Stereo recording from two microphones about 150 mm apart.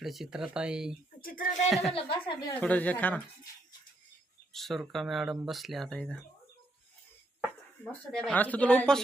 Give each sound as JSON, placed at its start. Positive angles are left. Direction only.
{"t": 0.0, "sound": "speech", "side_deg": 0}
{"t": 1.2, "sound": "music", "side_deg": 75}
{"t": 1.7, "sound": "speech", "side_deg": 0}
{"t": 2.0, "sound": "a woman's voice", "side_deg": 35}
{"t": 2.6, "sound": "speech", "side_deg": 10}
{"t": 4.5, "sound": "speech", "side_deg": 0}
{"t": 7.4, "sound": "speech", "side_deg": 10}